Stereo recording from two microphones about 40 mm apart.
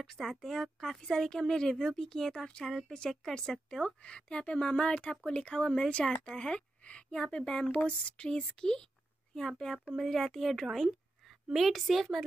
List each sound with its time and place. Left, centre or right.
0.2 s speech: centre
3.8 s speech: left
6.8 s a woman's voice: left
7.7 s a sound: left
8.3 s speech: left
9.3 s a woman's voice: centre